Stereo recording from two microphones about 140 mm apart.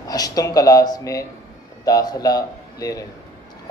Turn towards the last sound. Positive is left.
turn(degrees=25)  # may be behind; listen again after turning